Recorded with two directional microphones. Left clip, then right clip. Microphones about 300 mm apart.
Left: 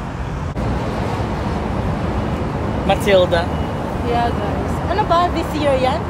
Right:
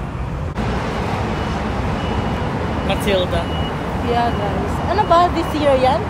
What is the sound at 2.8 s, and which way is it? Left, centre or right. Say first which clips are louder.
Speech: left 6 dB; left.